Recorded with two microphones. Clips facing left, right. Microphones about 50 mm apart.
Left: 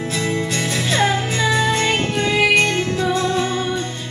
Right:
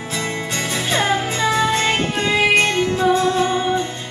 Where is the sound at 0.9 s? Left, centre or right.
Right.